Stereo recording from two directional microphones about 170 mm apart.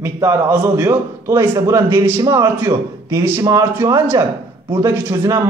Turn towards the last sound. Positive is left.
turn(degrees=-20)  # may be behind; listen again after turning